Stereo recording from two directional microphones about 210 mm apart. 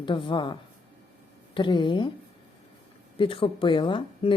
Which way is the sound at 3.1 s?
25° left (ahead or behind).